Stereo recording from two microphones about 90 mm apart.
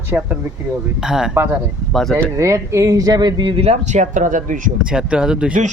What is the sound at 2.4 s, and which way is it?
Speech, 35° right (ahead or behind).